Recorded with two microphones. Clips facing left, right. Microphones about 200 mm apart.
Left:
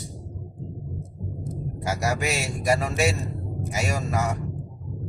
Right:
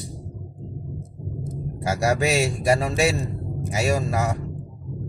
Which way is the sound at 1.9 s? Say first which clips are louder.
Right 7 dB; 30° right (ahead or behind).